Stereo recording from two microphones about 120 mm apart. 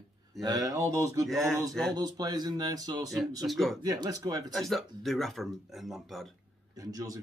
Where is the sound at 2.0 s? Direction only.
35° right (ahead or behind).